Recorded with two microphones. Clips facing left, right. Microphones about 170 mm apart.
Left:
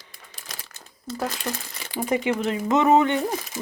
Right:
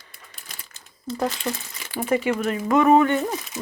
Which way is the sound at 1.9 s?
15° left (ahead or behind).